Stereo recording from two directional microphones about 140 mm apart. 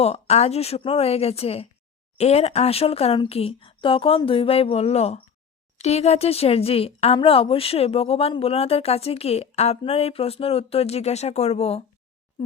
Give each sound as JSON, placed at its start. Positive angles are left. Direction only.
{"t": 0.0, "sound": "speech", "side_deg": 50}